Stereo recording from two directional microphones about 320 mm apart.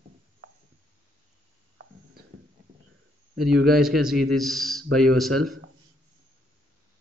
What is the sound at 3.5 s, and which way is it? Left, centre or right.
Speech, right.